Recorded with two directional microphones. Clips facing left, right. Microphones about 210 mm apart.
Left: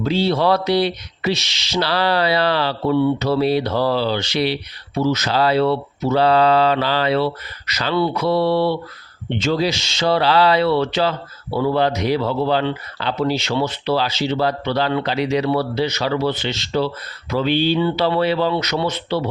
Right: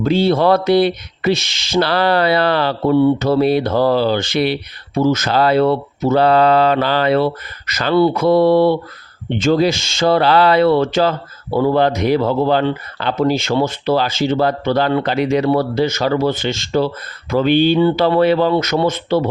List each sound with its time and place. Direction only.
0.0 s speech: 50° right (ahead or behind)